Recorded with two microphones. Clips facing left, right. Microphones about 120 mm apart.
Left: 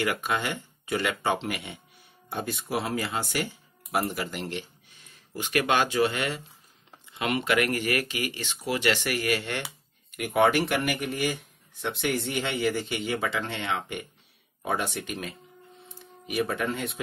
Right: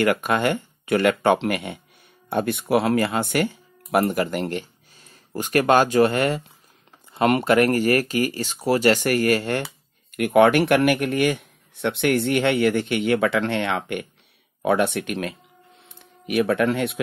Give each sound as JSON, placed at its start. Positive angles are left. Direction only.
{"t": 0.0, "sound": "speech", "side_deg": -55}
{"t": 10.1, "sound": "speech", "side_deg": -60}